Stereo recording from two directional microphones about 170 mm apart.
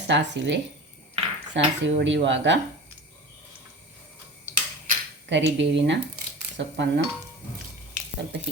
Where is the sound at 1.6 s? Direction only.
90° right.